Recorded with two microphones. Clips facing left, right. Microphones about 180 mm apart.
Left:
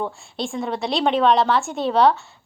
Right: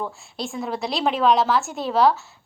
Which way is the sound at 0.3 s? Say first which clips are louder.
Left 2 dB; centre (ahead or behind).